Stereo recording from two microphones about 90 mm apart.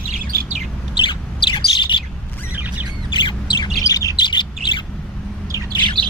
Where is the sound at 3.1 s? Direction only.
60° left (ahead or behind).